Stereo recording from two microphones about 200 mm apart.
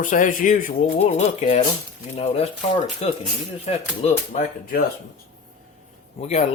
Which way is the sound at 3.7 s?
30° left (ahead or behind).